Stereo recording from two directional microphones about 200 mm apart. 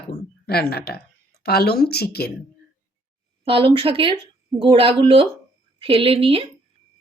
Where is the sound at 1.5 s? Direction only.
55° left (ahead or behind).